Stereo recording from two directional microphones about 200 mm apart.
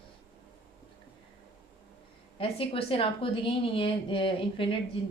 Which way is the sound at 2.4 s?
30° left (ahead or behind).